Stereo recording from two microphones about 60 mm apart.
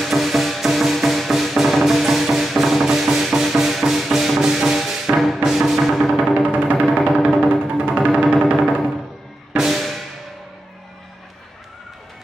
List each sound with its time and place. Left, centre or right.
0.0 s music: centre
6.4 s music: right
6.8 s music: centre
9.6 s music: centre